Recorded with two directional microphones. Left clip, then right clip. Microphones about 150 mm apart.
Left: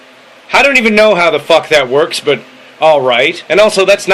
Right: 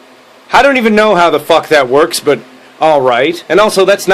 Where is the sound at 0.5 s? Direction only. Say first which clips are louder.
Even; 20° right (ahead or behind).